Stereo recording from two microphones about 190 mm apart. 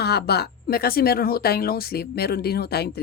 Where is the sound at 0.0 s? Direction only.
55° left (ahead or behind).